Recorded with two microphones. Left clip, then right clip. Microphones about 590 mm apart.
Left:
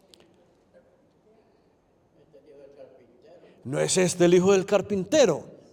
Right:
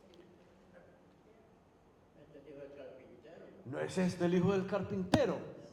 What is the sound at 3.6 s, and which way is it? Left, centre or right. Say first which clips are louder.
A man's voice: left 14 dB; left.